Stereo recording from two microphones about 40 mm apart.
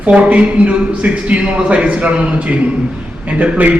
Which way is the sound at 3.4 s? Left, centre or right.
Right.